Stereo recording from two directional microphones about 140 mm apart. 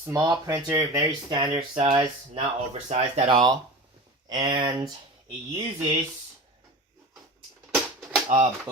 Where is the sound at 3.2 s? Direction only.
30° right (ahead or behind).